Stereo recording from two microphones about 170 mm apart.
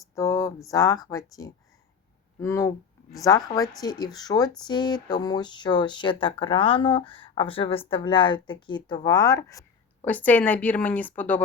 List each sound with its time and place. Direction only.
0.2 s a sound: 15° left (ahead or behind)
0.7 s speech: 20° left (ahead or behind)
10.1 s a woman's voice: 10° left (ahead or behind)